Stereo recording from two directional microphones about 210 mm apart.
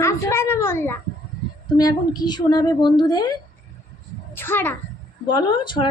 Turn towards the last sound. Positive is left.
turn(degrees=20)  # may be behind; listen again after turning